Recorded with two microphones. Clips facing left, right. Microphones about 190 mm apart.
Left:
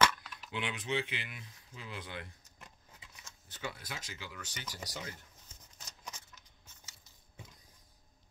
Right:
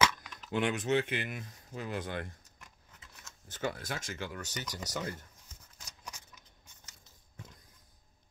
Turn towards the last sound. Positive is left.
turn(degrees=5)  # may be behind; listen again after turning